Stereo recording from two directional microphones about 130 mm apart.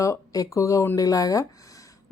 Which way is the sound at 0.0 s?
25° left (ahead or behind).